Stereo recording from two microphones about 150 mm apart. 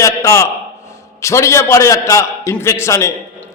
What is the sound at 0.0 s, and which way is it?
A man's voice, 20° left (ahead or behind).